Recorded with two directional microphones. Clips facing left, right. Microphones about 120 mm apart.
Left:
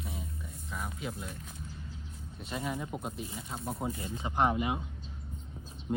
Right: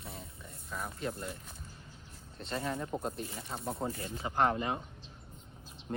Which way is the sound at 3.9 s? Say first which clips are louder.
Left 1 dB; 20° left (ahead or behind).